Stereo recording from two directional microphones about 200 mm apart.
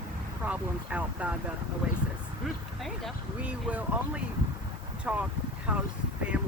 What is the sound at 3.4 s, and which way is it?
Speech, 5° right (ahead or behind).